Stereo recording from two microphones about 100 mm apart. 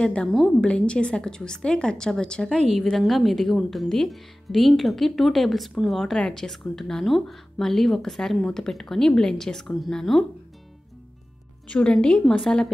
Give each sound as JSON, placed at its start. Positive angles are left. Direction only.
{"t": 0.0, "sound": "a woman's voice", "side_deg": 10}
{"t": 11.6, "sound": "a woman's voice", "side_deg": 10}